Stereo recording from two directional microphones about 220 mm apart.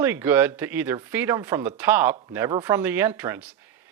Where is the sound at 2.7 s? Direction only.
10° right (ahead or behind).